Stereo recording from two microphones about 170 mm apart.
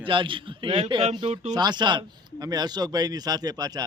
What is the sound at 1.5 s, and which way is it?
A man's voice, 25° right (ahead or behind).